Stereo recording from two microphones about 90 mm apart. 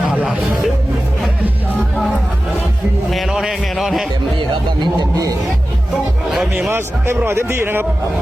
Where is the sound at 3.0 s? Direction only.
5° right (ahead or behind).